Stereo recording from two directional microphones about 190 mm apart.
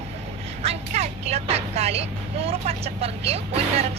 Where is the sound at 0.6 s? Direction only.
35° right (ahead or behind).